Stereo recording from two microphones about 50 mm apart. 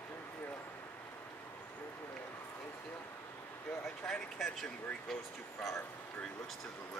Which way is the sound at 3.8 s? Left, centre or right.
Centre.